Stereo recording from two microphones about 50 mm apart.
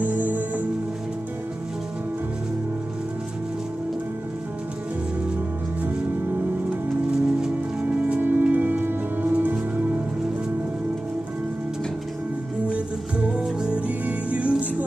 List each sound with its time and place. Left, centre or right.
0.0 s music: right
7.1 s music: centre
7.8 s rain on surface: right
8.2 s music: right
12.6 s music: right